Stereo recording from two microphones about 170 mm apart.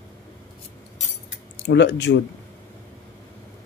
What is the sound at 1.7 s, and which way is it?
Speech, 90° left.